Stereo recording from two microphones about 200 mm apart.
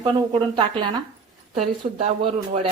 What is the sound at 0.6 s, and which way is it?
Speech, 20° right (ahead or behind).